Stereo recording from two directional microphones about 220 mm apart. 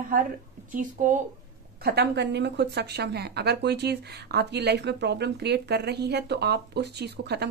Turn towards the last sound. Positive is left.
turn(degrees=-50)  # may be behind; listen again after turning